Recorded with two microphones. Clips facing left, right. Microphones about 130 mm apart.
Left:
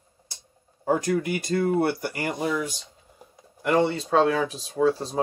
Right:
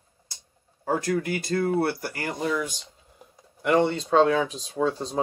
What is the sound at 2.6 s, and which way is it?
Speech, centre (ahead or behind).